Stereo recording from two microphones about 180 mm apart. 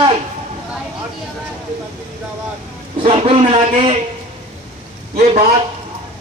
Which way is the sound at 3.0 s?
35° right (ahead or behind).